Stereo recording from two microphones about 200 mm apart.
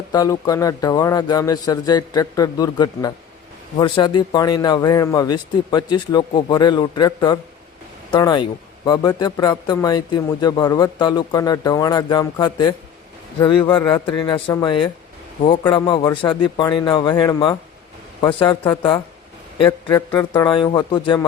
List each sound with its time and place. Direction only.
0.1 s a man's voice: 20° left (ahead or behind)
20.1 s a man's voice: 20° left (ahead or behind)